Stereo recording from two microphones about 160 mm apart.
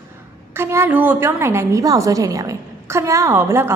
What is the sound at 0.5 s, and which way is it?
A woman's voice, 15° right (ahead or behind).